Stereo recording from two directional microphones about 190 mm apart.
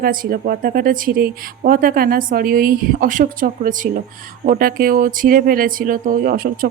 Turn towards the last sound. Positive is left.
turn(degrees=-50)  # may be behind; listen again after turning